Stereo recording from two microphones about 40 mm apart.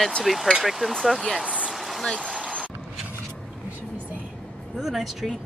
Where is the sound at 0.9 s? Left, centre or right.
Centre.